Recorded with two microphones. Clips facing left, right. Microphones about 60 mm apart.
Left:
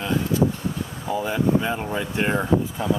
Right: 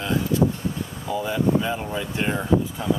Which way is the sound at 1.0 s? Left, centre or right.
Centre.